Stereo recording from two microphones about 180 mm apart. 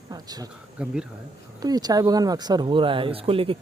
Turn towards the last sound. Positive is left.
turn(degrees=-30)  # may be behind; listen again after turning